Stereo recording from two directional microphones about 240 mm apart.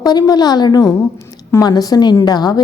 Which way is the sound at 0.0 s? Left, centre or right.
Centre.